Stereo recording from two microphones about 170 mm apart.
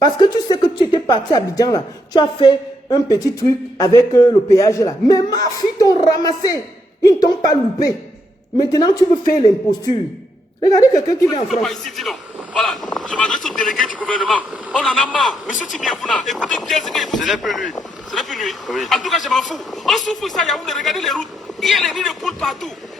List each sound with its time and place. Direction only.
0.2 s a woman's voice: 25° left (ahead or behind)
11.6 s speech: centre (ahead or behind)